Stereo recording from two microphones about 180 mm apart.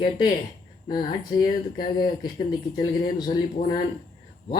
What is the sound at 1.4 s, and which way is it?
Speech, 25° left (ahead or behind).